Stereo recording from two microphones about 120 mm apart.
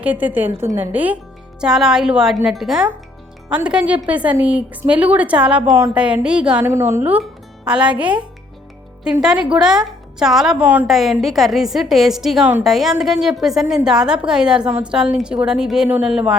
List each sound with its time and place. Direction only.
0.0 s a woman's voice: 15° right (ahead or behind)
6.7 s a woman's voice: 20° right (ahead or behind)
9.2 s a woman's voice: 5° right (ahead or behind)